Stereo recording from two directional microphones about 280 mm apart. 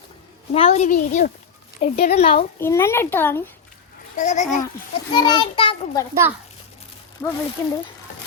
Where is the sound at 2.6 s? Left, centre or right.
Centre.